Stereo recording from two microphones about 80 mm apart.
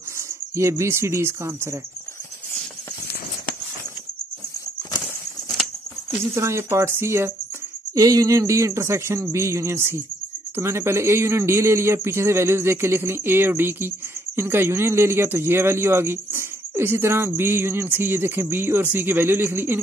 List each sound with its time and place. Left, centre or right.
0.6 s a man's voice: right
5.0 s a sound: centre
6.3 s a man's voice: right
7.9 s a man's voice: right